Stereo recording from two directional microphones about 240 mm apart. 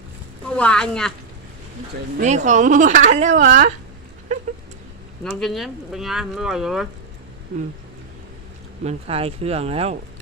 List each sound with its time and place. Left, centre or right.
0.5 s speech: centre
2.1 s speech: right
4.3 s cat: right
5.2 s speech: centre
8.8 s speech: right